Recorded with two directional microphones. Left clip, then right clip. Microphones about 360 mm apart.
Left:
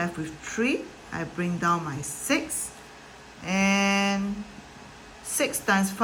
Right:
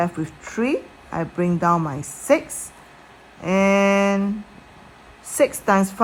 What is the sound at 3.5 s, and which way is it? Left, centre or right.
Speech, centre.